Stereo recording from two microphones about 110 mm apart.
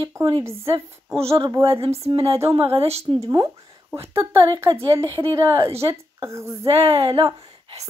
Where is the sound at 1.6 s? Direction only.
55° right (ahead or behind).